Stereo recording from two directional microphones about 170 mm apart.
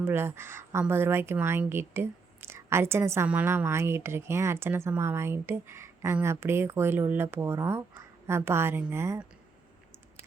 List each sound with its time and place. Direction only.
0.0 s speech: 15° right (ahead or behind)